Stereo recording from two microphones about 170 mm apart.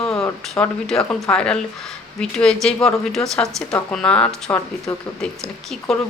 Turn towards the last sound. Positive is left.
turn(degrees=0)  # may be behind; listen again after turning